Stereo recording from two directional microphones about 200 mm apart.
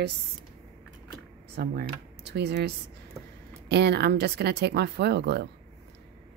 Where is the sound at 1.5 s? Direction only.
50° right (ahead or behind).